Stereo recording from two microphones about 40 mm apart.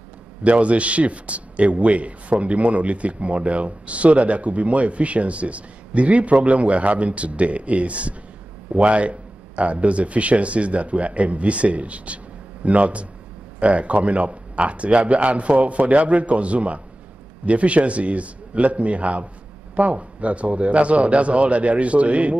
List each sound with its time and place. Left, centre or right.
0.4 s a man's voice: right